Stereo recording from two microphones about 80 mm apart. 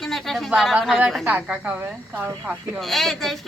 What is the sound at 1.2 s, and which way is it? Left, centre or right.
Speech, centre.